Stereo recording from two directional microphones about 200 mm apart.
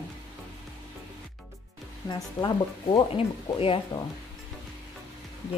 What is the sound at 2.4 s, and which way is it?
Speech, 20° left (ahead or behind).